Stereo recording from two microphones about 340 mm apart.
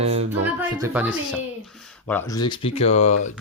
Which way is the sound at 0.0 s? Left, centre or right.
Centre.